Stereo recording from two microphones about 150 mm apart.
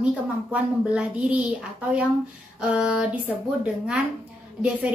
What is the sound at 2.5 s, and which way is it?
Speech, 5° right (ahead or behind).